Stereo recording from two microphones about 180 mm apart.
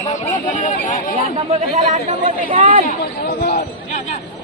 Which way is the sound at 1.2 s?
35° right (ahead or behind).